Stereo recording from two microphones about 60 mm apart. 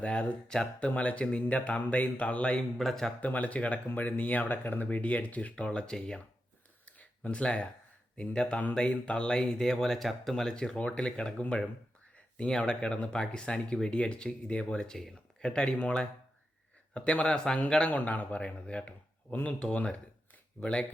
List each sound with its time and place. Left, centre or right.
0.0 s speech: centre
0.9 s speech: left
2.6 s speech: centre
3.2 s speech: left; by 6.2 s centre
6.8 s a sound: centre
8.1 s speech: centre
17.8 s speech: left
19.3 s speech: left